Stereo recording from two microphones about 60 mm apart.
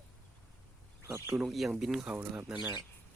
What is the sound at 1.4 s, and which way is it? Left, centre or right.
Speech, centre.